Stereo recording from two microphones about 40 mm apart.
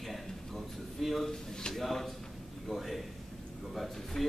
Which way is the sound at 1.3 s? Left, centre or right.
Centre.